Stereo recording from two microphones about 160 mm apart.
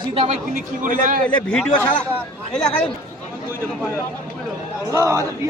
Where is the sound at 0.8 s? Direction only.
55° right (ahead or behind).